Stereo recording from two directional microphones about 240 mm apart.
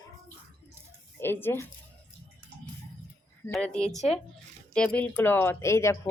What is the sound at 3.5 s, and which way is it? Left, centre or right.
Speech, centre.